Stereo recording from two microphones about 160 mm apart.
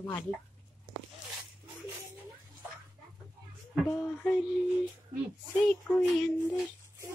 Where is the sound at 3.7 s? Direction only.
Centre (ahead or behind).